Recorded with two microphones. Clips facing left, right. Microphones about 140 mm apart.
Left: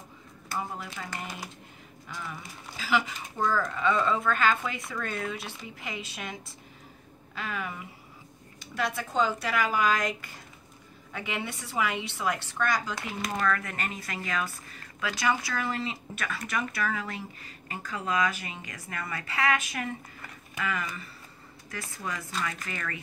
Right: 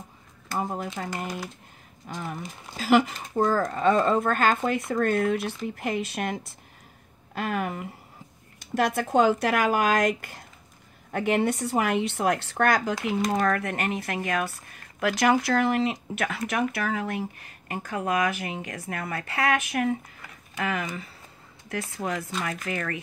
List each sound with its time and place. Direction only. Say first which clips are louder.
0.6 s speech: right 6 dB; 45° right (ahead or behind)
2.0 s speech: right 6 dB; 50° right (ahead or behind)
15.0 s speech: right 7 dB; 65° right (ahead or behind)
20.6 s speech: right 4 dB; 70° right (ahead or behind)
22.4 s speech: right 4 dB; 60° right (ahead or behind)